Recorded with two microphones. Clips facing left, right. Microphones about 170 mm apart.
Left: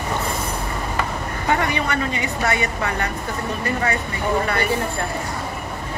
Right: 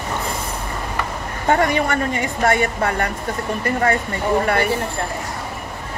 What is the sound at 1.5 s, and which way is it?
A woman's voice, 45° right (ahead or behind).